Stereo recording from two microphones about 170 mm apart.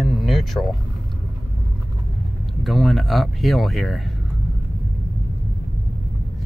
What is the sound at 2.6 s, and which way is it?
Speech, centre (ahead or behind).